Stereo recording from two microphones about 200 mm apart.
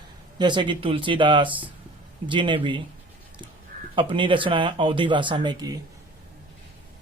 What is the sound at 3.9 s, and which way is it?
Speech, 25° right (ahead or behind).